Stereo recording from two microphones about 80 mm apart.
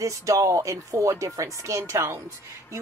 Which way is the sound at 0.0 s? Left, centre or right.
Right.